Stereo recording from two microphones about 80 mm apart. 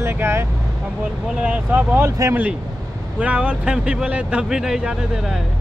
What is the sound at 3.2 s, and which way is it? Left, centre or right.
Speech, centre.